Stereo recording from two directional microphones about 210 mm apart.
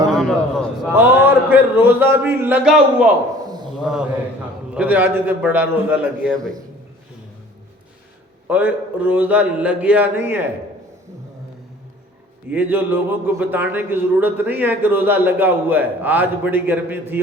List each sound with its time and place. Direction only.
0.1 s a sound: centre (ahead or behind)
1.0 s a man's voice: 10° right (ahead or behind)
3.4 s a sound: 20° right (ahead or behind)
3.8 s a man's voice: 5° right (ahead or behind)
8.4 s a man's voice: 5° right (ahead or behind)
12.5 s a man's voice: 10° right (ahead or behind)